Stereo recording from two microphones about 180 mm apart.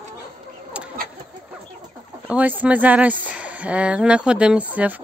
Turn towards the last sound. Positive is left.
turn(degrees=-5)  # may be behind; listen again after turning